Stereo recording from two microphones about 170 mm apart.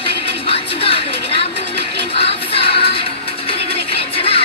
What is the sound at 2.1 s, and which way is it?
Music, 35° left (ahead or behind).